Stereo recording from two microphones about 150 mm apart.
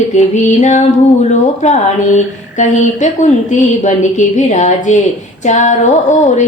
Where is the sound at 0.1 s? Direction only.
55° left (ahead or behind).